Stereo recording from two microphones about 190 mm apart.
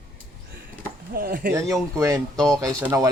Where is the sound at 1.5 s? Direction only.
15° right (ahead or behind).